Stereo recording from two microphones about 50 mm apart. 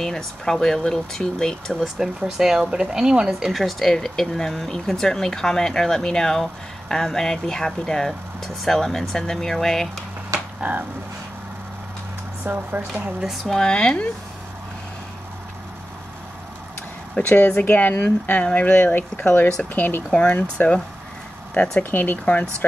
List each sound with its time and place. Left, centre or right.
0.0 s speech: centre
2.0 s speech: centre
3.6 s speech: centre
10.6 s speech: right
12.4 s speech: right
13.2 s speech: centre
13.6 s speech: centre
17.3 s a woman's voice: left
18.4 s a woman's voice: left
20.1 s speech: left
21.9 s a woman's voice: left
22.2 s speech: left